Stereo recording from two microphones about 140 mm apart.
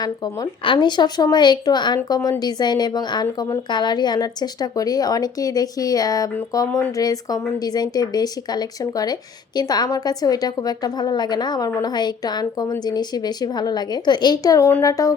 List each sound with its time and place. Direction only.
0.6 s a woman's voice: 35° left (ahead or behind)